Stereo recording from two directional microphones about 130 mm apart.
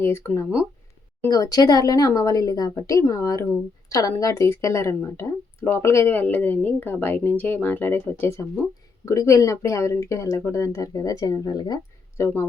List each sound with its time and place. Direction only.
0.0 s a woman's voice: 20° left (ahead or behind)
12.1 s speech: 20° left (ahead or behind)